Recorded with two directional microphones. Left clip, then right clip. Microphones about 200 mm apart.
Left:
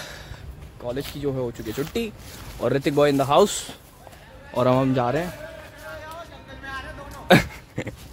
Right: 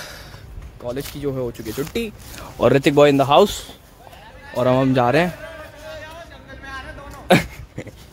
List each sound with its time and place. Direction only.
0.8 s speech: 15° right (ahead or behind)
2.6 s speech: 25° right (ahead or behind)
3.4 s speech: centre (ahead or behind)
4.9 s speech: 20° right (ahead or behind)
7.3 s speech: centre (ahead or behind)